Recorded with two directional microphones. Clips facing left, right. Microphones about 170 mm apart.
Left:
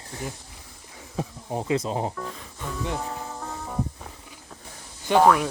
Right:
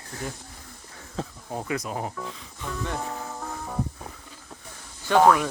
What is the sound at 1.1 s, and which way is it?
Speech, 20° left (ahead or behind).